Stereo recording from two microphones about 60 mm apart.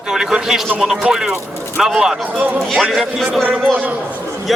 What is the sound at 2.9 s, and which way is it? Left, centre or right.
Speech, centre.